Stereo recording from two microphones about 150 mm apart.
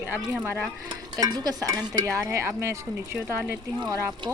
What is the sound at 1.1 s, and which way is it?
Stir, 25° right (ahead or behind).